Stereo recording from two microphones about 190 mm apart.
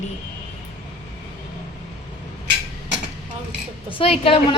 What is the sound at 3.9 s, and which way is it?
Speech, 30° left (ahead or behind).